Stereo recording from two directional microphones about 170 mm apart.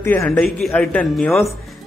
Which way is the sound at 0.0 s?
10° left (ahead or behind).